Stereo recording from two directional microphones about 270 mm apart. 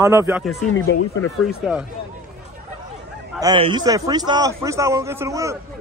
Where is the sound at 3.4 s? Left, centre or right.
Centre.